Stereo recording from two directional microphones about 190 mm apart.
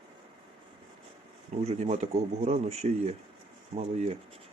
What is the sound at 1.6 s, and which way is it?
Speech, 35° right (ahead or behind).